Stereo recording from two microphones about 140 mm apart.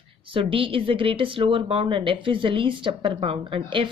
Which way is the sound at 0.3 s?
40° right (ahead or behind).